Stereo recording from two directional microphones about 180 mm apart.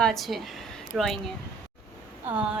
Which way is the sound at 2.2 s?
5° right (ahead or behind).